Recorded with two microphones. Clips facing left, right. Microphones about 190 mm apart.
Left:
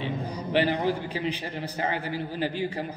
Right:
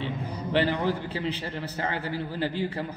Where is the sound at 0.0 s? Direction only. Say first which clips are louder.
Left 1 dB; 15° left (ahead or behind).